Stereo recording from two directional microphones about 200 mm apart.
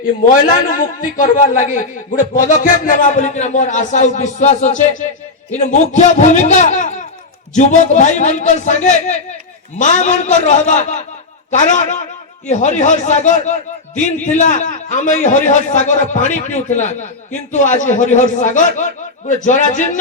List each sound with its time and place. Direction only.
0.8 s a man's voice: 40° left (ahead or behind)